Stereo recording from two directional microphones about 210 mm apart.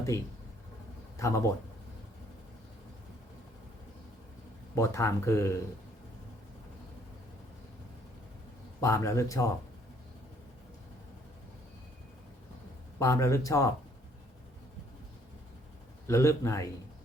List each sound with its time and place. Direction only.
0.1 s speech: 15° left (ahead or behind)
4.7 s speech: 15° left (ahead or behind)
8.8 s speech: 15° left (ahead or behind)
13.0 s speech: 15° left (ahead or behind)
16.0 s speech: 15° left (ahead or behind)